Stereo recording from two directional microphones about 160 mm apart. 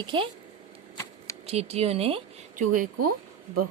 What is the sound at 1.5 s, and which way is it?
Speech, 40° right (ahead or behind).